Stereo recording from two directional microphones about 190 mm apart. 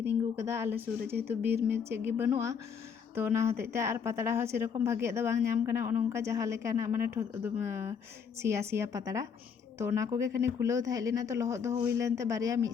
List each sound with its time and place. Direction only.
0.3 s a woman's voice: 15° right (ahead or behind)
1.4 s speech: 55° right (ahead or behind)
1.8 s a woman's voice: 15° right (ahead or behind)